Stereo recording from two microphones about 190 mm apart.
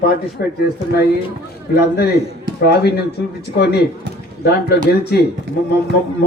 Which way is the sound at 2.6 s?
55° left (ahead or behind).